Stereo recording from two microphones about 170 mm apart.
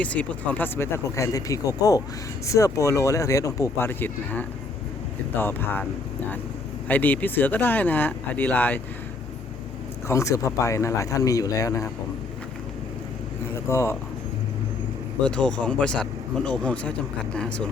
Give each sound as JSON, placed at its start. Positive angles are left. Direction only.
{"t": 0.0, "sound": "speech", "side_deg": 10}
{"t": 10.1, "sound": "speech", "side_deg": 20}
{"t": 13.7, "sound": "speech", "side_deg": 15}
{"t": 15.2, "sound": "speech", "side_deg": 5}